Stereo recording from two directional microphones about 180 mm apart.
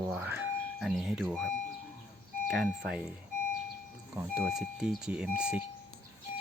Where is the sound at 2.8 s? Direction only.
5° right (ahead or behind).